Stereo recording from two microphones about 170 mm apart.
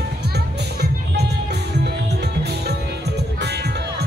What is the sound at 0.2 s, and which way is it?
Music, 75° right (ahead or behind).